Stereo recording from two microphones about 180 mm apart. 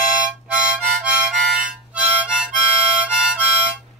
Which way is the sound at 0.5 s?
5° right (ahead or behind).